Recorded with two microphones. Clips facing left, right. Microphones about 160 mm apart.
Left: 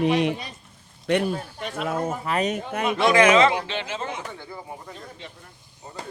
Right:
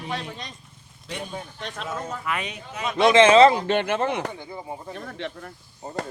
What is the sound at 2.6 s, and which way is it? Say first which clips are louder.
Speech: left 7 dB; 60° left (ahead or behind).